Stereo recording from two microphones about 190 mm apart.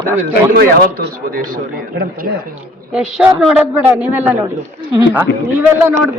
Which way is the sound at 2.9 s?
5° right (ahead or behind).